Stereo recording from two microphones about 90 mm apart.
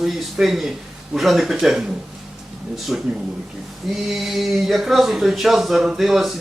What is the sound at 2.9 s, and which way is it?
Speech, 5° right (ahead or behind).